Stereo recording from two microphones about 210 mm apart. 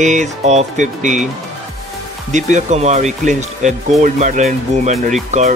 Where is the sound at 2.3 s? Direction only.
35° right (ahead or behind).